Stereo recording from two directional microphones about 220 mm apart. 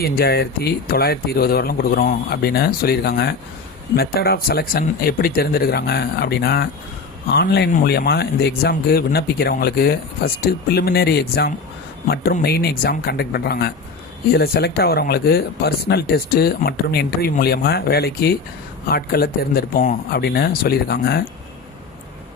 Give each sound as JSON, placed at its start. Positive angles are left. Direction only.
{"t": 0.0, "sound": "speech", "side_deg": 45}